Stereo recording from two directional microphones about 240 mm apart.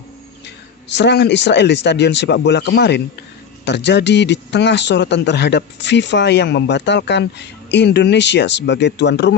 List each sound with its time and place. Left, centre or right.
0.4 s a man's voice: left